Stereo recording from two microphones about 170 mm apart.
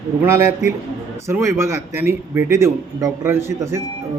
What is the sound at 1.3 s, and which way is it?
Speech, 15° right (ahead or behind).